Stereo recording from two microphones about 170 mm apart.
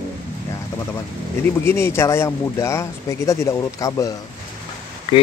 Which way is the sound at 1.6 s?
15° left (ahead or behind).